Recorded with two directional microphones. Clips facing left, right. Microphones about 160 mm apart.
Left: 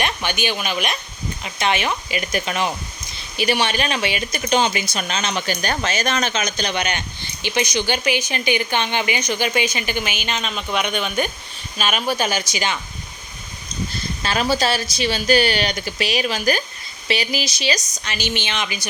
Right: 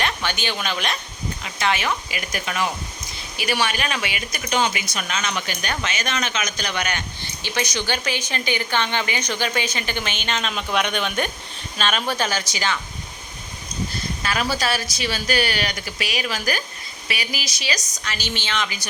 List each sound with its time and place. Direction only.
0.0 s speech: 15° left (ahead or behind)
14.2 s speech: 30° left (ahead or behind)